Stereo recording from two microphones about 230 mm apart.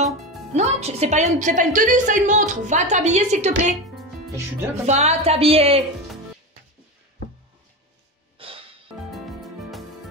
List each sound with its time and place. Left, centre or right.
0.6 s a woman's voice: right
4.7 s speech: right
8.4 s music: right
9.1 s music: centre